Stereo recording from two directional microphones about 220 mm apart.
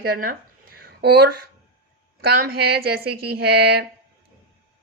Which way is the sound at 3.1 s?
90° right.